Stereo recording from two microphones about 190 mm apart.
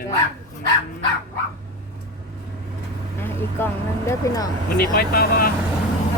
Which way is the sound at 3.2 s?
10° left (ahead or behind).